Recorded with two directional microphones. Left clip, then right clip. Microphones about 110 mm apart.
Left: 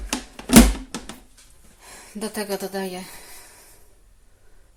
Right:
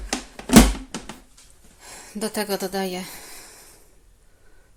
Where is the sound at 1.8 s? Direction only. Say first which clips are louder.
Right 2 dB; 25° right (ahead or behind); by 3.6 s 45° right (ahead or behind).